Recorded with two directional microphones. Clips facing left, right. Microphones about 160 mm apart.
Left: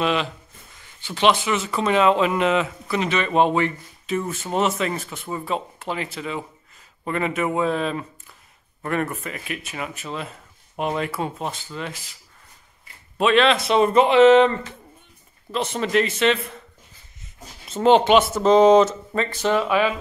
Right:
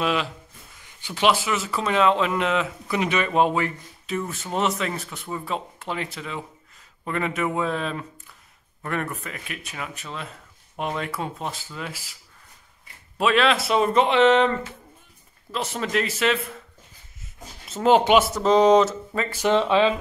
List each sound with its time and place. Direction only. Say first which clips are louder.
0.0 s speech: left 2 dB; 5° right (ahead or behind)
2.9 s speech: left 1 dB; 10° right (ahead or behind)
13.2 s speech: left 3 dB; 5° right (ahead or behind)
17.6 s speech: left 2 dB; 5° right (ahead or behind)
19.5 s speech: right 2 dB; 25° right (ahead or behind)